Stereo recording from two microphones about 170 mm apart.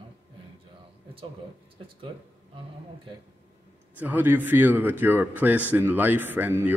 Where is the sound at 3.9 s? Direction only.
10° right (ahead or behind).